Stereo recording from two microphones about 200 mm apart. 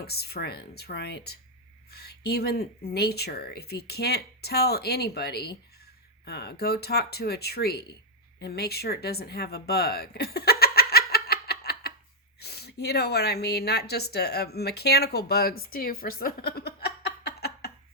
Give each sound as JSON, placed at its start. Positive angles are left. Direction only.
{"t": 0.0, "sound": "speech", "side_deg": 50}
{"t": 8.4, "sound": "a sound", "side_deg": 55}
{"t": 12.4, "sound": "speech", "side_deg": 55}